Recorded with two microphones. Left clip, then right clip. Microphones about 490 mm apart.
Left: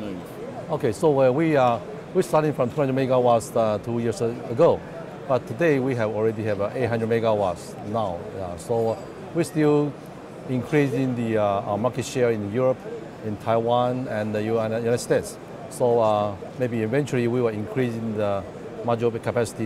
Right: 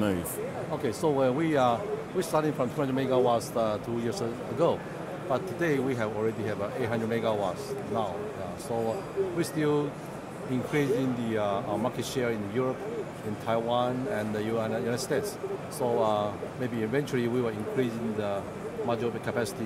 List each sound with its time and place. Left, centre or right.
0.8 s speech: left